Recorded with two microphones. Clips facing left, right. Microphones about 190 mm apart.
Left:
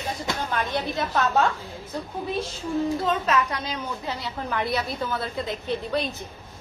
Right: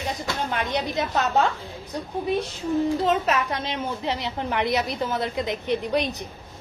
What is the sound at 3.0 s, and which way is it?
A woman's voice, 25° right (ahead or behind).